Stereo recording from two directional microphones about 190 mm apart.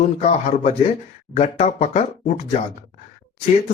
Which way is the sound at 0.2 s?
35° left (ahead or behind).